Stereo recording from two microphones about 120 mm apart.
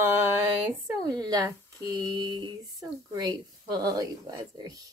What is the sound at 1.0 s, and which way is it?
Speech, 30° right (ahead or behind).